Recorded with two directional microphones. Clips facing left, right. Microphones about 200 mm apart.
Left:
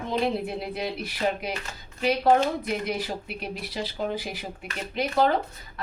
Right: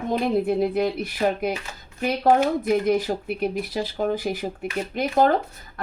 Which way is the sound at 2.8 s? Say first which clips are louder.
Right 8 dB; 45° right (ahead or behind).